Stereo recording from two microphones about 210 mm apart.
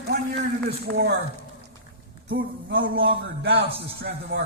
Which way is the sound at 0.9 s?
55° right (ahead or behind).